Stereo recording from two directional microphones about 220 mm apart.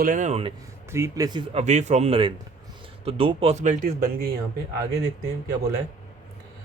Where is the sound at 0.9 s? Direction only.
15° right (ahead or behind).